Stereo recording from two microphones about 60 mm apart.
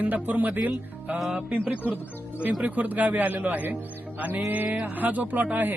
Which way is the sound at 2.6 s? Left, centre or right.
Right.